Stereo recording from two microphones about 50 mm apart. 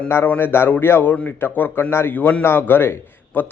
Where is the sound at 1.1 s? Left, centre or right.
Left.